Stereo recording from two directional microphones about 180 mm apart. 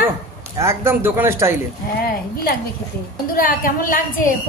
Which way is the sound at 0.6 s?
15° right (ahead or behind).